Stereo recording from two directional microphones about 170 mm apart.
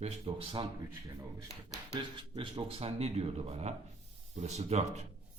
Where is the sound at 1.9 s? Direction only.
30° right (ahead or behind).